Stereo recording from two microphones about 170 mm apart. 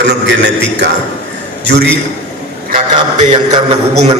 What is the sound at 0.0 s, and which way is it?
Speech, 85° right.